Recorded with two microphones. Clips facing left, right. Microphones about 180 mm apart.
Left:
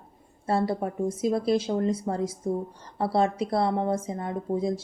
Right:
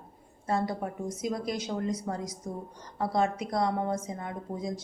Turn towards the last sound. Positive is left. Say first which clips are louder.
# left 8 dB
turn(degrees=30)  # may be behind; listen again after turning